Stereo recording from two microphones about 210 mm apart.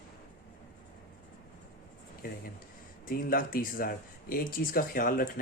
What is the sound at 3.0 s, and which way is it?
Speech, 45° left (ahead or behind).